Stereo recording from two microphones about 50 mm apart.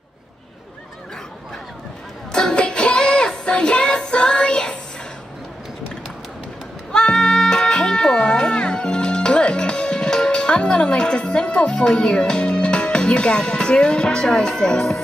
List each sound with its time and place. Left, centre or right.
2.3 s music: centre
6.9 s music: centre